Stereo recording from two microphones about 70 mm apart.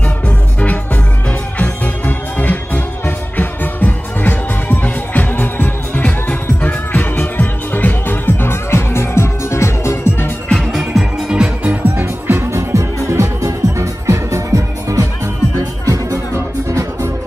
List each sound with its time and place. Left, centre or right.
1.6 s music: left
10.5 s music: centre
10.9 s music: centre
12.0 s music: right
16.3 s music: right